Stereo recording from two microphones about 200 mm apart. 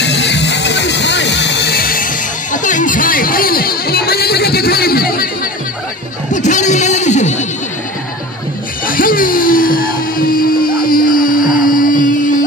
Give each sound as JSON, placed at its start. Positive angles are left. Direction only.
{"t": 0.0, "sound": "music", "side_deg": 60}
{"t": 6.3, "sound": "a sound", "side_deg": 35}
{"t": 8.8, "sound": "music", "side_deg": 45}